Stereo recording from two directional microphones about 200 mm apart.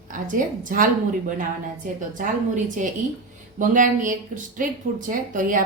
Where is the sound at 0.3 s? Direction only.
40° right (ahead or behind).